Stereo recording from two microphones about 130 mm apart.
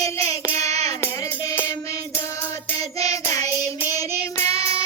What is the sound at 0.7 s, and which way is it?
Child singing, 55° right (ahead or behind).